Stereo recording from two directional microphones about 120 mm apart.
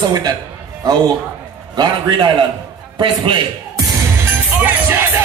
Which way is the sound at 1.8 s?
35° right (ahead or behind).